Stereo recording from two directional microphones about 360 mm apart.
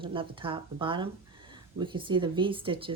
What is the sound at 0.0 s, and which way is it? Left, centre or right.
Speech, centre.